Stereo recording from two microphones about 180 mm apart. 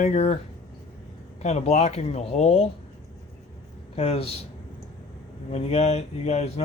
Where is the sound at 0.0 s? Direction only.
40° left (ahead or behind).